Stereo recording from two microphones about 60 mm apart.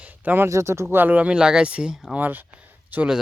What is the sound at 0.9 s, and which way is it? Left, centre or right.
Speech, right.